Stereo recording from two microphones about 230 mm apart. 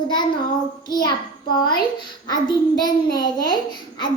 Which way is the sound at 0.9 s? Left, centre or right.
Centre.